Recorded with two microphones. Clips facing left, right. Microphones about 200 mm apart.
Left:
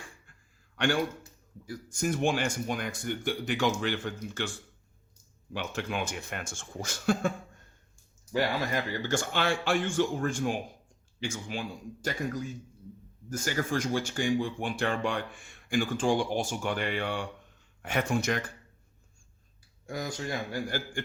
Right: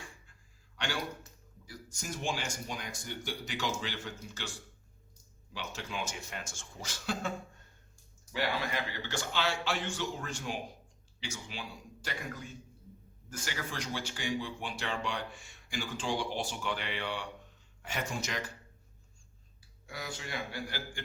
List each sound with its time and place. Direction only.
0.8 s speech: 55° left (ahead or behind)
5.5 s speech: 55° left (ahead or behind)
8.3 s speech: 45° left (ahead or behind)
19.9 s speech: 45° left (ahead or behind)